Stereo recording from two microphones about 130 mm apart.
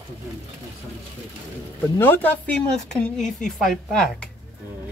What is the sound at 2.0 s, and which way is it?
Speech, 15° left (ahead or behind).